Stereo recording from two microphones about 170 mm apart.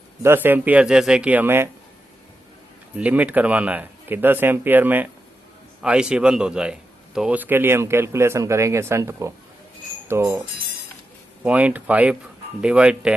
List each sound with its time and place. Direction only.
0.2 s a man's voice: 15° right (ahead or behind)
2.9 s a man's voice: 10° right (ahead or behind)
11.4 s a man's voice: 10° right (ahead or behind)